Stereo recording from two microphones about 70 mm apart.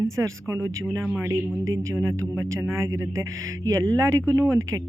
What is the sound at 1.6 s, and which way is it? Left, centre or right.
Speech, right.